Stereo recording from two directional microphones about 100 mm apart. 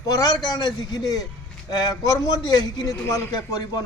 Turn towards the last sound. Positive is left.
turn(degrees=45)  # may be behind; listen again after turning